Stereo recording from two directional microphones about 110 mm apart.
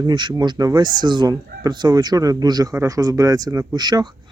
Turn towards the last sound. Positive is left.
turn(degrees=-40)  # may be behind; listen again after turning